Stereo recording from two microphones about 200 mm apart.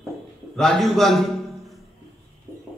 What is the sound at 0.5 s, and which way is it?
A man's voice, centre (ahead or behind).